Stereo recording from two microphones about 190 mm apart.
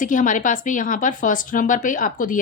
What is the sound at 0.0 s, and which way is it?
Speech, 45° left (ahead or behind).